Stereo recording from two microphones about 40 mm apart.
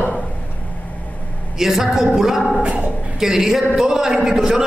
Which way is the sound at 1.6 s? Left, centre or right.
Centre.